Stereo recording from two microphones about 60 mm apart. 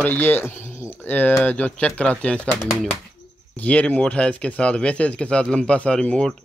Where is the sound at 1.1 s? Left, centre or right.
Left.